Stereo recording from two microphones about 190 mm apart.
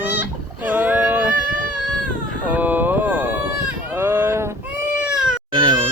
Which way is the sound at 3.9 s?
15° right (ahead or behind).